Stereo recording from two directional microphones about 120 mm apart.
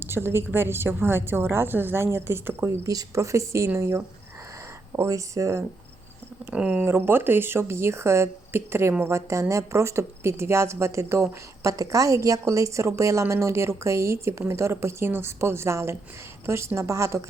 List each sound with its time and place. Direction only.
0.0 s speech: 20° right (ahead or behind)
6.4 s speech: 10° right (ahead or behind)